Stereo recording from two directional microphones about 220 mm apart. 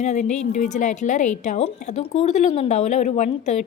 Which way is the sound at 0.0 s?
30° left (ahead or behind).